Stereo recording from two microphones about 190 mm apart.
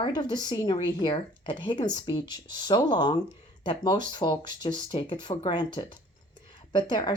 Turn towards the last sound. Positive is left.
turn(degrees=25)  # may be behind; listen again after turning